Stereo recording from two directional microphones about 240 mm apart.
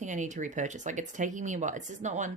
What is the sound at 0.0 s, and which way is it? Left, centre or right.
Speech, right.